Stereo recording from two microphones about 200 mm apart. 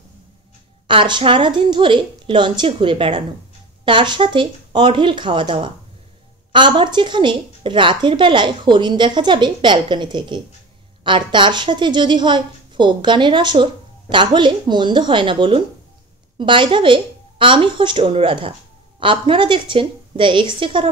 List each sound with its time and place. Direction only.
0.8 s a woman's voice: 25° right (ahead or behind)